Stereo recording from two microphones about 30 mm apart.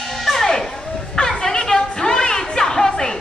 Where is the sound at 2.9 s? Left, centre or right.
Left.